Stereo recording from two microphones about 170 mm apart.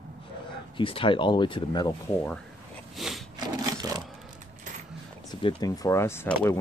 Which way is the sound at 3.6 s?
20° right (ahead or behind).